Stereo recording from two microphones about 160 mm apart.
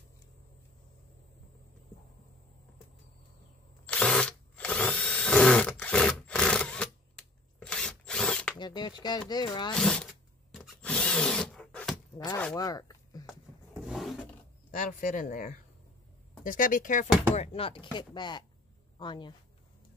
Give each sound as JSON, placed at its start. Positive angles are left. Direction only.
{"t": 3.8, "sound": "drill", "side_deg": 5}
{"t": 8.5, "sound": "speech", "side_deg": 25}
{"t": 9.8, "sound": "drill", "side_deg": 5}
{"t": 12.5, "sound": "speech", "side_deg": 25}
{"t": 13.3, "sound": "roaring cats", "side_deg": 0}
{"t": 14.7, "sound": "speech", "side_deg": 55}
{"t": 17.4, "sound": "speech", "side_deg": 35}